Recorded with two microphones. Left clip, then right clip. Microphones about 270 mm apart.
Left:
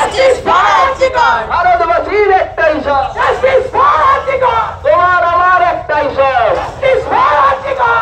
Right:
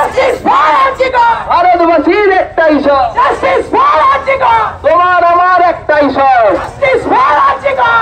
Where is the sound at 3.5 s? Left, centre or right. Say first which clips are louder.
Right 1 dB; right.